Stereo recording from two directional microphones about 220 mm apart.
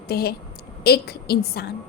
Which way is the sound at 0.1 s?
45° left (ahead or behind).